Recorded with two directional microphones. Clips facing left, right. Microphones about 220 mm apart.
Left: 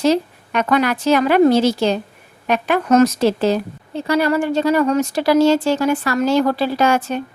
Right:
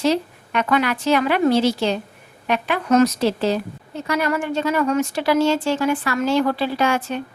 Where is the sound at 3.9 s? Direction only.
30° left (ahead or behind).